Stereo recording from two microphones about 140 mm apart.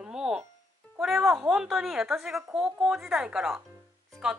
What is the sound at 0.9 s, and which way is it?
A woman's voice, centre (ahead or behind).